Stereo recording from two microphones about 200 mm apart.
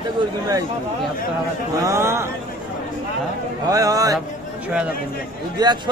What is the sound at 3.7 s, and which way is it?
Speech, 15° right (ahead or behind).